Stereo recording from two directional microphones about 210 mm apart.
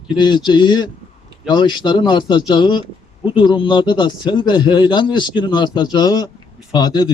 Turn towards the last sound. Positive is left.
turn(degrees=20)  # may be behind; listen again after turning